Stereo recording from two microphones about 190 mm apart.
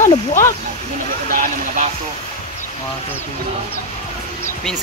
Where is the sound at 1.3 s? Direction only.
45° right (ahead or behind).